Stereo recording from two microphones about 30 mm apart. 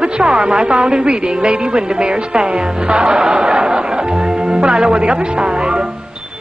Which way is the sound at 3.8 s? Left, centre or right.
Right.